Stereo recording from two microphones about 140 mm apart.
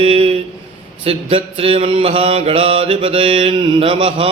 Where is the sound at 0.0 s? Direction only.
40° right (ahead or behind).